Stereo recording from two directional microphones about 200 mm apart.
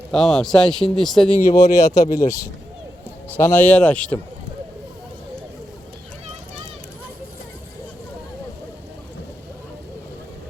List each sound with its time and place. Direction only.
0.1 s speech: centre (ahead or behind)
1.5 s speech: 15° left (ahead or behind)